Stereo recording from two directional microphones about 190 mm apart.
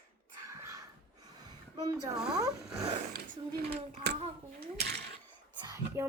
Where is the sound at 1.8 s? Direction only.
20° right (ahead or behind).